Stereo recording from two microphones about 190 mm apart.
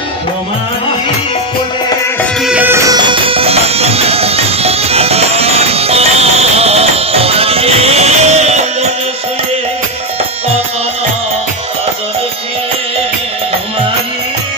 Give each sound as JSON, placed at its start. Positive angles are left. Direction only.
{"t": 2.4, "sound": "music", "side_deg": -10}